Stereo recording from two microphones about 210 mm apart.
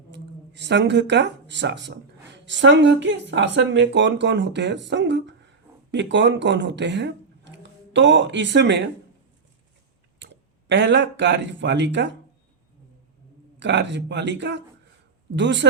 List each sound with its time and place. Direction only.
0.1 s speech: 55° right (ahead or behind)
10.2 s speech: 60° right (ahead or behind)
13.6 s speech: 55° right (ahead or behind)